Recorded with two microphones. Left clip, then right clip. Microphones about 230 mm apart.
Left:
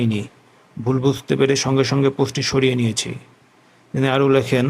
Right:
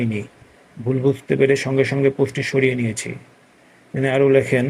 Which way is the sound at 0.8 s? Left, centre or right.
Left.